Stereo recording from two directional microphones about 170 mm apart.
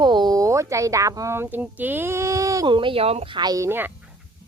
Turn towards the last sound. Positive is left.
turn(degrees=-15)  # may be behind; listen again after turning